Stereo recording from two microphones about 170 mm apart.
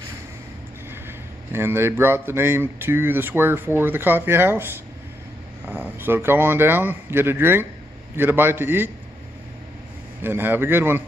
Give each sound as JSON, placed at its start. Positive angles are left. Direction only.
{"t": 1.0, "sound": "speech", "side_deg": -15}
{"t": 10.2, "sound": "speech", "side_deg": -10}